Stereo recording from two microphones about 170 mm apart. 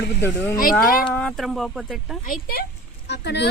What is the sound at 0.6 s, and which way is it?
Speech, 60° left (ahead or behind).